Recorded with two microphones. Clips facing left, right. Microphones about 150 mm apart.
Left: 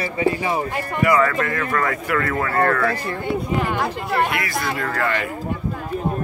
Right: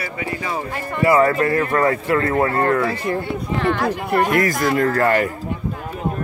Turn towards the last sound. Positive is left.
turn(degrees=-40)  # may be behind; listen again after turning